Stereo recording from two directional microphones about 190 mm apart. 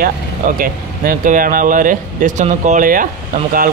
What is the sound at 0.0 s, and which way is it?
Speech, 50° right (ahead or behind).